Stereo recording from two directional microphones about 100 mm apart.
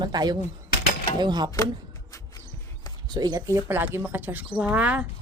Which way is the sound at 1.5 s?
35° left (ahead or behind).